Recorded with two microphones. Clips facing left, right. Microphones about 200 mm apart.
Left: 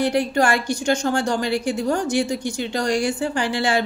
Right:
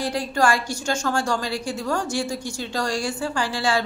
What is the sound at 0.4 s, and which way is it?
A woman's voice, 20° left (ahead or behind).